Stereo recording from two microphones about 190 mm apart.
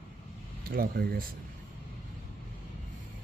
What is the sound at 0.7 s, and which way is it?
Speech, 50° right (ahead or behind).